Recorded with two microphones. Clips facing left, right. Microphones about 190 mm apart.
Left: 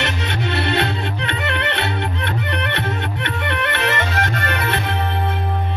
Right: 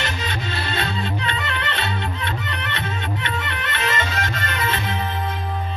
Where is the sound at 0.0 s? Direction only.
65° left (ahead or behind).